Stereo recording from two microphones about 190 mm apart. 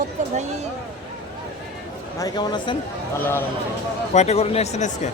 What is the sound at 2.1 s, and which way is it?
Speech, 20° left (ahead or behind).